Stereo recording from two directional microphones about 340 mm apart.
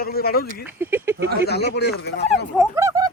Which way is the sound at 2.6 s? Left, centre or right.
Centre.